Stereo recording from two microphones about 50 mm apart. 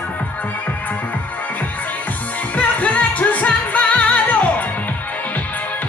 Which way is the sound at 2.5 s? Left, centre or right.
Left.